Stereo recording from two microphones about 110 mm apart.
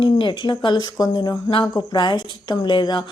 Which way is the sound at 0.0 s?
45° left (ahead or behind).